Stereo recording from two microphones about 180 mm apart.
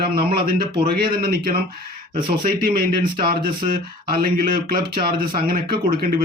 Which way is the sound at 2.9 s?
25° right (ahead or behind).